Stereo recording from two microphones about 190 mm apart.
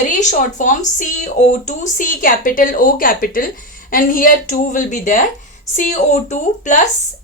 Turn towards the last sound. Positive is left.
turn(degrees=40)  # may be behind; listen again after turning